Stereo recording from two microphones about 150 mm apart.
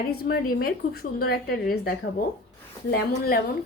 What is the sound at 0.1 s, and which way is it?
A woman's voice, 90° left.